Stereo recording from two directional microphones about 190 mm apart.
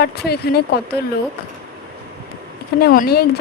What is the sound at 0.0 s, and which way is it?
Speech, 55° left (ahead or behind).